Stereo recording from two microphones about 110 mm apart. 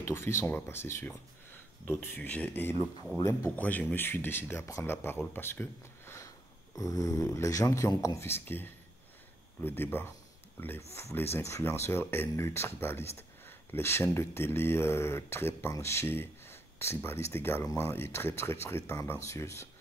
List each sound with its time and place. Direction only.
0.0 s speech: 25° left (ahead or behind)
3.2 s speech: 30° left (ahead or behind)
3.5 s speech: 15° left (ahead or behind)